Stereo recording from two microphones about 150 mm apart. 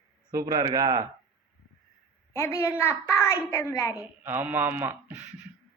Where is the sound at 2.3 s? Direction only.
20° left (ahead or behind).